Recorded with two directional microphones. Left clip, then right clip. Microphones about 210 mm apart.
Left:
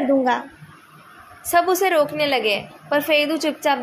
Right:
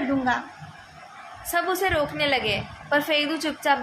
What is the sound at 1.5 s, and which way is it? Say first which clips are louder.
A woman's voice: left 6 dB; 25° left (ahead or behind).